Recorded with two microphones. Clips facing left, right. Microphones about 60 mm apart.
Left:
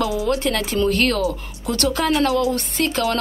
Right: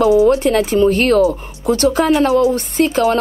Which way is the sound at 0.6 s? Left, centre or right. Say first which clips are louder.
Right 8 dB; centre.